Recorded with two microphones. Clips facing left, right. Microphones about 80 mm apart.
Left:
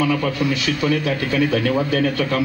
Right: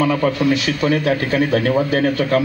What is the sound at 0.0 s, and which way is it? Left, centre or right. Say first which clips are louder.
A man's voice: right 3 dB; right.